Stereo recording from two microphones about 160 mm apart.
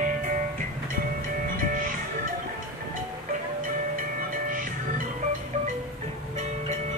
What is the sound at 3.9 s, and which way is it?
Music, 55° right (ahead or behind).